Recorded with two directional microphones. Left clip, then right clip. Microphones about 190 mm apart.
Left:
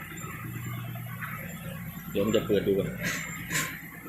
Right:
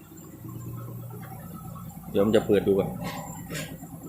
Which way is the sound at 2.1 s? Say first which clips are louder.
Right 4 dB; 25° right (ahead or behind).